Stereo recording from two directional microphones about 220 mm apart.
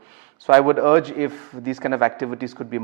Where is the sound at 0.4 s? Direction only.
15° right (ahead or behind).